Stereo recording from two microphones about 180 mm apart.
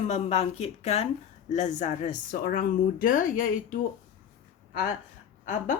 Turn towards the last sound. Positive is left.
turn(degrees=45)  # may be behind; listen again after turning